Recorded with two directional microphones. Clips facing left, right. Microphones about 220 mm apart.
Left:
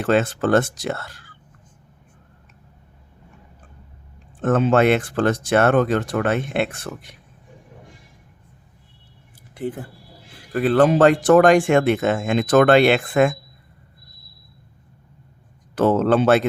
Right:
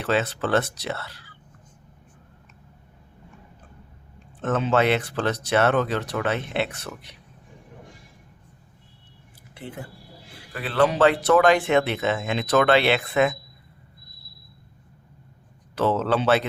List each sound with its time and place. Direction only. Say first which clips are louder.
0.0 s speech: left 5 dB; 50° left (ahead or behind)
4.4 s speech: left 5 dB; 50° left (ahead or behind)
10.5 s speech: left 6 dB; 50° left (ahead or behind)
15.7 s speech: left 6 dB; 50° left (ahead or behind)